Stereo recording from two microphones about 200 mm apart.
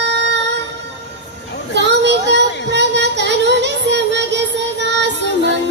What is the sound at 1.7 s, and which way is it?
Child singing, 60° right (ahead or behind).